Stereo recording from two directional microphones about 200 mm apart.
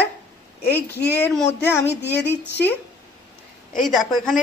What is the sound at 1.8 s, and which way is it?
Child singing, 55° left (ahead or behind).